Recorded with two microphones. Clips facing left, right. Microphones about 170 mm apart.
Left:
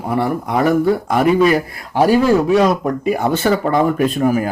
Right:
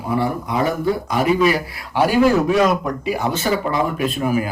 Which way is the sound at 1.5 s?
40° left (ahead or behind).